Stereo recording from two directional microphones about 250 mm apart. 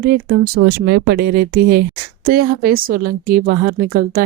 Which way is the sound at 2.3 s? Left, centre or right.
Right.